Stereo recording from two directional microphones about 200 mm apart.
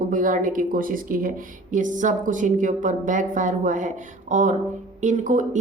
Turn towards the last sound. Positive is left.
turn(degrees=-40)  # may be behind; listen again after turning